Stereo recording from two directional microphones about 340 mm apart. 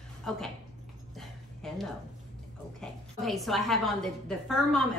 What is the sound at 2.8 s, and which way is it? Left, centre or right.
A woman's voice, centre.